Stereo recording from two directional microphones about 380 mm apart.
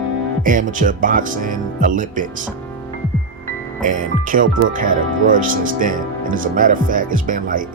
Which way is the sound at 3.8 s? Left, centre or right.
Centre.